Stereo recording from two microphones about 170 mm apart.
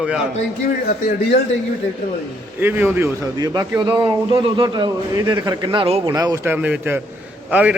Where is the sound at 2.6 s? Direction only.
10° right (ahead or behind).